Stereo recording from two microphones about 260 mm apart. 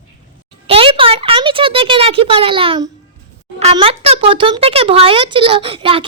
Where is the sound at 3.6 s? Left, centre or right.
Right.